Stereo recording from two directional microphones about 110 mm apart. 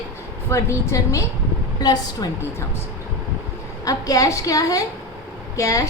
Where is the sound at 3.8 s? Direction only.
30° left (ahead or behind).